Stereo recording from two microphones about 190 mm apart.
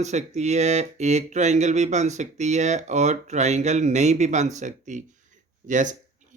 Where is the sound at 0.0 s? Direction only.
35° right (ahead or behind).